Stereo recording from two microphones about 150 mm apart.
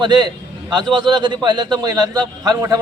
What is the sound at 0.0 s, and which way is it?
A man's voice, 30° right (ahead or behind).